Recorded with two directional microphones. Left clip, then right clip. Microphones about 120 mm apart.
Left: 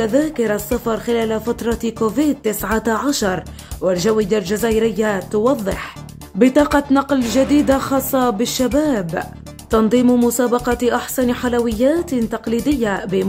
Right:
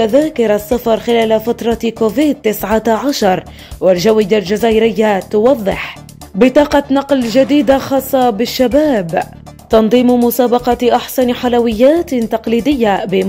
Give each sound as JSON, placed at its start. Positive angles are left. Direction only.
{"t": 0.0, "sound": "speech", "side_deg": -10}
{"t": 2.1, "sound": "speech", "side_deg": -20}
{"t": 10.0, "sound": "speech", "side_deg": 0}
{"t": 10.3, "sound": "speech", "side_deg": -10}